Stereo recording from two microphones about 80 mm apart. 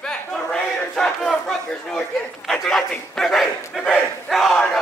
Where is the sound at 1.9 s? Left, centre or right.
Centre.